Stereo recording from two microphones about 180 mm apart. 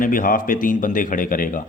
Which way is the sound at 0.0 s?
50° left (ahead or behind).